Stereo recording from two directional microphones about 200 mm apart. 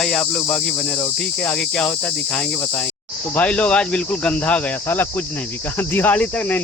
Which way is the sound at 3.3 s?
5° left (ahead or behind).